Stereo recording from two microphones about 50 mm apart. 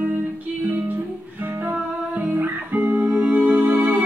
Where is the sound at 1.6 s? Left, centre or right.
Right.